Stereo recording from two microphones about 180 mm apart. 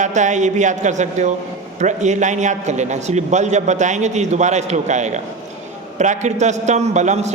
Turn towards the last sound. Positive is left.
turn(degrees=-40)  # may be behind; listen again after turning